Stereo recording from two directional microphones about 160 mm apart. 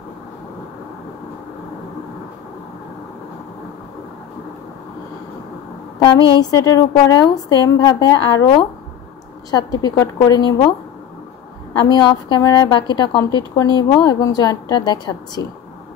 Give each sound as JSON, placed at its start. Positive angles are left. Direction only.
{"t": 6.0, "sound": "a woman's voice", "side_deg": 25}
{"t": 11.8, "sound": "a woman's voice", "side_deg": 30}